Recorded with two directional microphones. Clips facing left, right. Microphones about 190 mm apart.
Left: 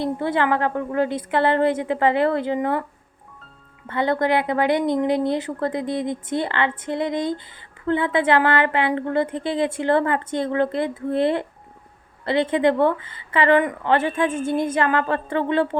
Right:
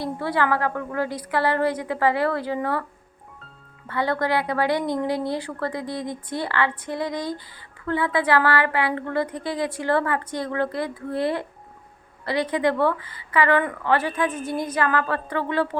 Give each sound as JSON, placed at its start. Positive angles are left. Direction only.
{"t": 0.0, "sound": "a woman's voice", "side_deg": 20}
{"t": 3.8, "sound": "a woman's voice", "side_deg": 20}